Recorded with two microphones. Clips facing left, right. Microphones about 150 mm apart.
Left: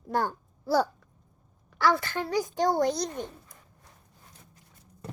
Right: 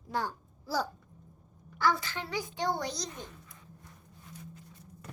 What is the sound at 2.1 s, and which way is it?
A child's voice, 45° left (ahead or behind).